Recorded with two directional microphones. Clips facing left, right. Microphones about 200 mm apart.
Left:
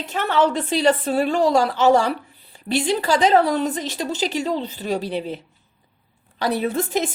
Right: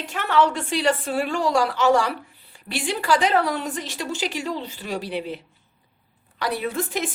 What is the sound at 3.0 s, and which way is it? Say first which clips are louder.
A woman's voice: left 2 dB; 40° left (ahead or behind).